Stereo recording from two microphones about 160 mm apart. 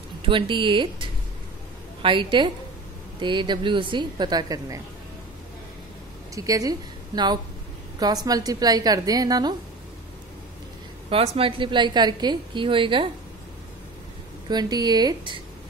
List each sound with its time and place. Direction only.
0.2 s a woman's voice: 30° right (ahead or behind)
6.3 s a woman's voice: 20° right (ahead or behind)
11.1 s a woman's voice: 35° right (ahead or behind)
14.5 s a woman's voice: 25° right (ahead or behind)